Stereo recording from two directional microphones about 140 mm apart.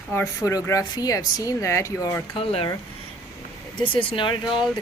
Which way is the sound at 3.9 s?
35° left (ahead or behind).